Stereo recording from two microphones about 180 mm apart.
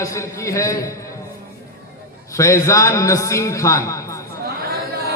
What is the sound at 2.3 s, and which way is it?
A man's voice, 15° left (ahead or behind).